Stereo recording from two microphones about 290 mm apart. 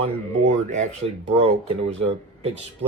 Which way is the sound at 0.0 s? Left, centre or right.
Right.